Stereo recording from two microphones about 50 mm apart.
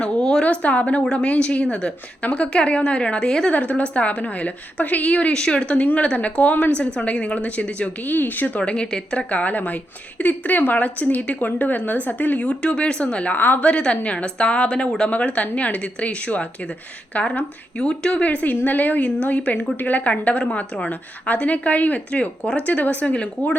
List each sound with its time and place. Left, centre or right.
0.0 s a sound: centre
0.4 s a woman's voice: left
3.5 s a woman's voice: left
8.1 s a woman's voice: left
8.6 s speech: centre
9.1 s a woman's voice: left
12.4 s a woman's voice: left
13.3 s a woman's voice: left; by 18.2 s centre
18.2 s a woman's voice: left